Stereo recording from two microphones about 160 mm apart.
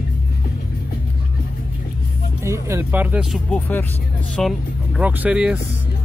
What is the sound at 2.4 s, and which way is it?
Speech, 15° right (ahead or behind).